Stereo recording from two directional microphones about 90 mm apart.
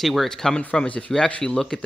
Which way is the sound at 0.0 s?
Centre (ahead or behind).